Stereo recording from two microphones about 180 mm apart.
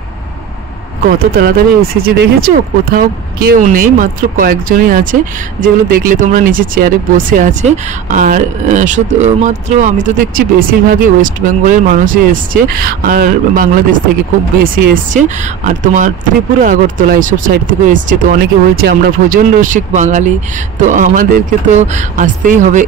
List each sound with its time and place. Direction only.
1.0 s speech: 55° right (ahead or behind)
15.1 s speech: 45° right (ahead or behind)